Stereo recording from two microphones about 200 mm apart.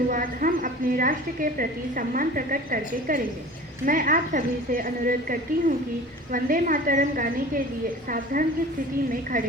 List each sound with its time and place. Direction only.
0.1 s a woman's voice: 45° right (ahead or behind)